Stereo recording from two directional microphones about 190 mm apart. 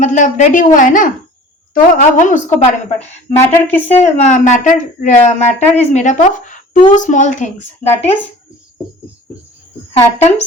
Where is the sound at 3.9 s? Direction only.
35° left (ahead or behind).